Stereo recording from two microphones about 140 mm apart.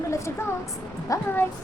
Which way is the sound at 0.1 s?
20° left (ahead or behind).